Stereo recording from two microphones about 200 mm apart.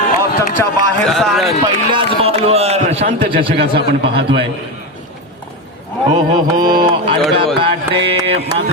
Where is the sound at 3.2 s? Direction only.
45° right (ahead or behind).